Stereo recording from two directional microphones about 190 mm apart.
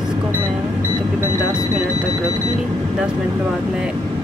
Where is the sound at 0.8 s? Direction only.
20° right (ahead or behind).